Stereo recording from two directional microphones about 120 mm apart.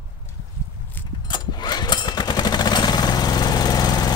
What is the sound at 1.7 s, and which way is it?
Vehicle, 35° left (ahead or behind).